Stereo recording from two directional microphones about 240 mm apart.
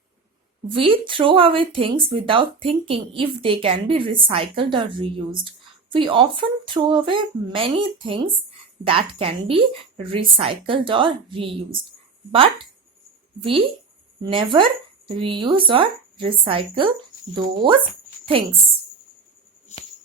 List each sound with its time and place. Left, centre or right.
0.7 s speech: right